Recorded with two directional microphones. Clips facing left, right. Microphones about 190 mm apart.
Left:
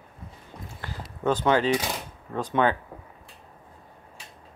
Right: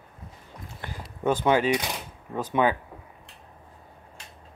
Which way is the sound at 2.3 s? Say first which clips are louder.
Even; 10° right (ahead or behind).